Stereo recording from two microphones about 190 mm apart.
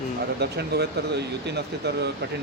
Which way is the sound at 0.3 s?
60° right (ahead or behind).